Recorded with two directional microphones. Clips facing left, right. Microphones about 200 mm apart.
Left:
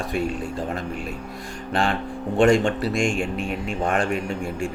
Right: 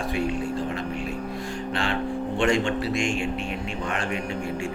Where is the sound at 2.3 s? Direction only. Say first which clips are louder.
Left 6 dB; 50° left (ahead or behind).